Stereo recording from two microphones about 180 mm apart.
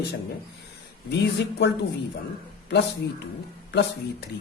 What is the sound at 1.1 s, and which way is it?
Speech, 65° left (ahead or behind).